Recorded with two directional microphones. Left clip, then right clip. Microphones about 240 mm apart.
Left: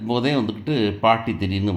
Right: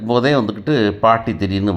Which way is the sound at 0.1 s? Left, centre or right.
Centre.